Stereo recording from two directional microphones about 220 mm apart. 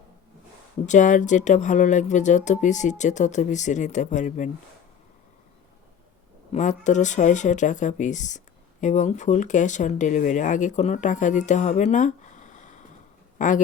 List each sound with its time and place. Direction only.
0.9 s speech: 35° left (ahead or behind)
6.5 s speech: 35° left (ahead or behind)